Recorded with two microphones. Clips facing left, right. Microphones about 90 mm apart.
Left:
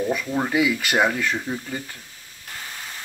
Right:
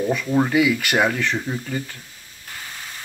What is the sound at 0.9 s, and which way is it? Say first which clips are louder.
Speech: left 2 dB; 10° left (ahead or behind).